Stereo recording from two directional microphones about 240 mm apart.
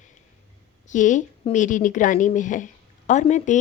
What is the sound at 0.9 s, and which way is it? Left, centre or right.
A woman's voice, left.